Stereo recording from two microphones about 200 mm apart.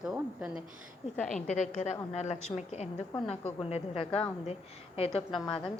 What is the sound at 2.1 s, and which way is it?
A woman's voice, 35° left (ahead or behind).